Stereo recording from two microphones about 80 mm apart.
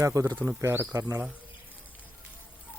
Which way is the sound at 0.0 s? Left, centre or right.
Right.